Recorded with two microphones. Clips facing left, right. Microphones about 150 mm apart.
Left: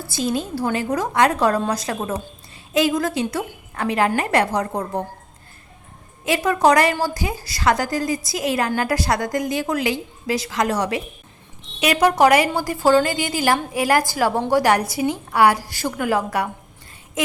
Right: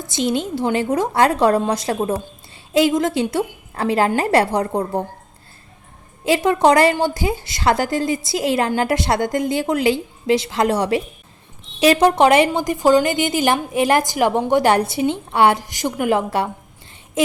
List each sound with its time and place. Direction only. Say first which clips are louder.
0.0 s a woman's voice: right 3 dB; 20° right (ahead or behind)
6.2 s a woman's voice: right 2 dB; 25° right (ahead or behind)